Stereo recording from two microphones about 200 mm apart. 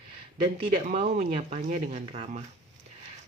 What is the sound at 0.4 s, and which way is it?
Speech, 30° right (ahead or behind).